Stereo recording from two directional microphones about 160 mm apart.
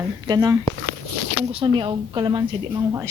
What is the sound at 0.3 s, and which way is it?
Speech, 20° right (ahead or behind).